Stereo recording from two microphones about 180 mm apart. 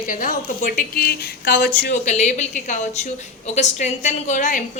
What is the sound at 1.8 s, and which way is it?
A woman's voice, 45° left (ahead or behind).